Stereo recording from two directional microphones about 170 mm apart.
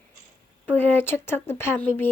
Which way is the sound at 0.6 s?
10° left (ahead or behind).